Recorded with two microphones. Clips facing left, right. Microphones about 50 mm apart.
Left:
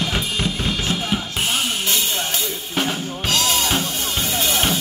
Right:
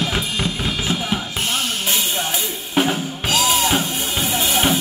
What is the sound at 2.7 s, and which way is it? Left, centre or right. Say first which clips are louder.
Drum kit: right 5 dB; centre.